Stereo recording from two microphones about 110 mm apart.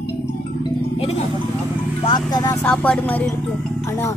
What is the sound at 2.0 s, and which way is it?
Speech, 40° left (ahead or behind).